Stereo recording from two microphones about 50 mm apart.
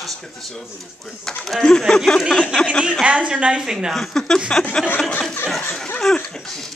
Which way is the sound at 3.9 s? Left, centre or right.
Centre.